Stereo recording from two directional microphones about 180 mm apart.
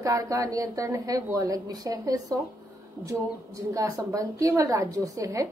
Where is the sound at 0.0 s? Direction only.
20° right (ahead or behind).